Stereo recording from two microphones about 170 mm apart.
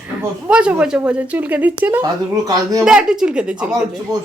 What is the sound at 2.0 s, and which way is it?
Speech, 20° right (ahead or behind).